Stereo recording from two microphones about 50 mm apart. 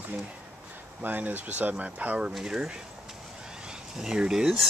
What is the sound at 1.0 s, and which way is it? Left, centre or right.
Speech, right.